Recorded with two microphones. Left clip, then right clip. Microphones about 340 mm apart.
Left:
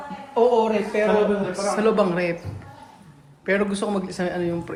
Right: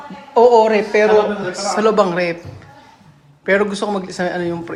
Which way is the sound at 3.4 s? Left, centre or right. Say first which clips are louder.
Right 7 dB; centre.